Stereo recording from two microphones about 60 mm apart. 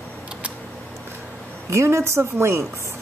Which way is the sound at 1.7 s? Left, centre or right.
Right.